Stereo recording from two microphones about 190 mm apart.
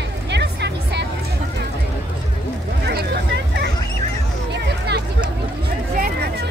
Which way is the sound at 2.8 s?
60° right (ahead or behind).